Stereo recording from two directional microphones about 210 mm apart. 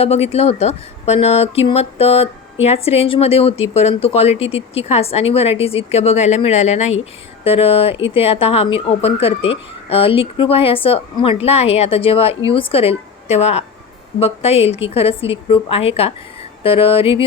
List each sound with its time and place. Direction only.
0.0 s speech: 30° left (ahead or behind)